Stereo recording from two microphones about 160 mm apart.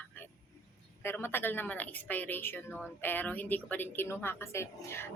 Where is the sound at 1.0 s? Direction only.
15° left (ahead or behind).